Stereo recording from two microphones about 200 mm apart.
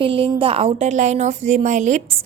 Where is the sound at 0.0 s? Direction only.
25° right (ahead or behind).